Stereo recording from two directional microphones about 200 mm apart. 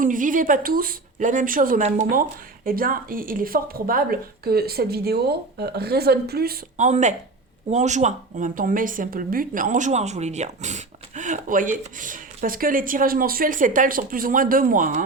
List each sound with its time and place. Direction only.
0.0 s speech: 40° right (ahead or behind)